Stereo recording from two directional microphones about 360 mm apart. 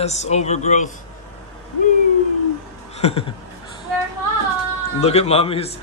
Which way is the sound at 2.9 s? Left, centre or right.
Centre.